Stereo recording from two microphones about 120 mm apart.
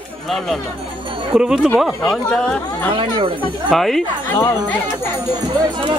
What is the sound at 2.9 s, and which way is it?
Speech, 45° right (ahead or behind).